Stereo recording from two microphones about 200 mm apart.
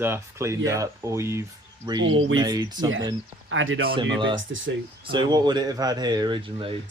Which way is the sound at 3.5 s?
75° right (ahead or behind).